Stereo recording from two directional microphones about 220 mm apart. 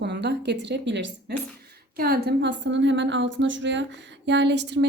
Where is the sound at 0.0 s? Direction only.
50° right (ahead or behind).